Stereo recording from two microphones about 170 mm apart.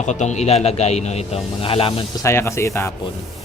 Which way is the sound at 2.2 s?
15° left (ahead or behind).